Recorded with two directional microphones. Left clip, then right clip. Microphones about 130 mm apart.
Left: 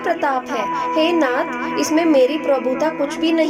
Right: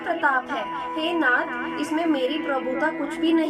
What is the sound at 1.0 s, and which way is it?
A woman's voice, 35° left (ahead or behind).